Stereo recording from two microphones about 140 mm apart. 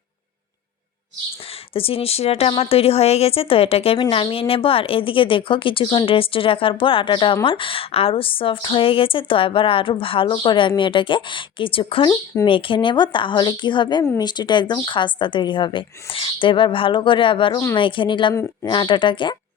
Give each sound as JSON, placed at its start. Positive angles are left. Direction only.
{"t": 1.7, "sound": "a woman's voice", "side_deg": 40}